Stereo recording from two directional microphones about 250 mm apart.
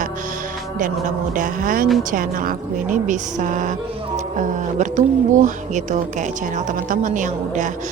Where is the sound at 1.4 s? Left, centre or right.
Right.